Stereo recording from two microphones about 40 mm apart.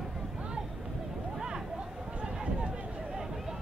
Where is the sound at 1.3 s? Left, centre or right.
Centre.